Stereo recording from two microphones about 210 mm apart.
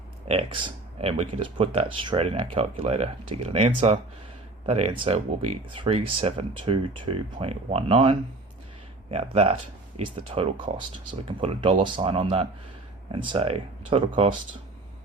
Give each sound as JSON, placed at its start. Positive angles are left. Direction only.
{"t": 0.3, "sound": "speech", "side_deg": -25}